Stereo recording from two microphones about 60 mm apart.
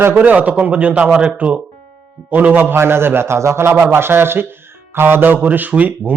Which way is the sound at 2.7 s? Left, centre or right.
Right.